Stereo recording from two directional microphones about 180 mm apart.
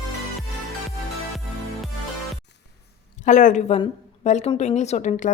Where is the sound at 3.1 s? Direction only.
45° left (ahead or behind).